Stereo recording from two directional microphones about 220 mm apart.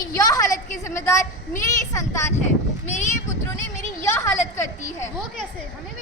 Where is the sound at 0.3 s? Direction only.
15° left (ahead or behind).